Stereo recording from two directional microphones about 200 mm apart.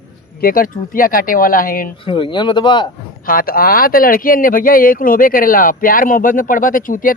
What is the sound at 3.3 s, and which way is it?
Speech, 45° left (ahead or behind).